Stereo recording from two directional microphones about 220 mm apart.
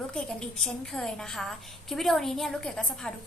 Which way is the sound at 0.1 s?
5° left (ahead or behind).